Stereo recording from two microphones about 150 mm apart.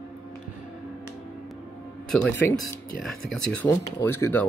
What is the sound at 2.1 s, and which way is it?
Speech, 10° left (ahead or behind).